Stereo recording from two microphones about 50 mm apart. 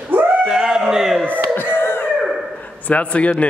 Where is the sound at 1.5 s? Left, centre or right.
Left.